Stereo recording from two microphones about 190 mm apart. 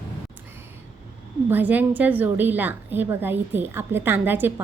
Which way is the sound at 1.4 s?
10° right (ahead or behind).